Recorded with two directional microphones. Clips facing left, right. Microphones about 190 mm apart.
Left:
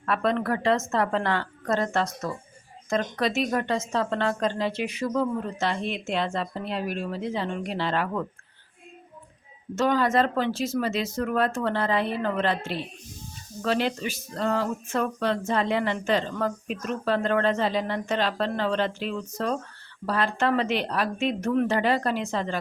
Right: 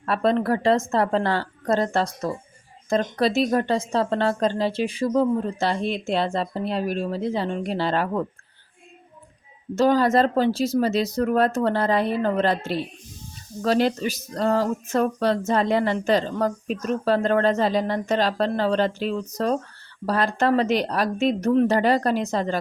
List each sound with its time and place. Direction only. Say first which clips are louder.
0.0 s speech: right 4 dB; 35° right (ahead or behind)
9.7 s speech: right 4 dB; 35° right (ahead or behind)